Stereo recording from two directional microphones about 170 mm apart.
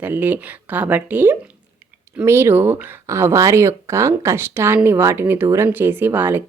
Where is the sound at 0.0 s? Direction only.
10° right (ahead or behind).